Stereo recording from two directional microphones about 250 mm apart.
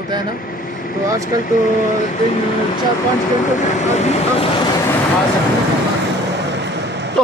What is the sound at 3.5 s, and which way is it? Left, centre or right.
Speech, left.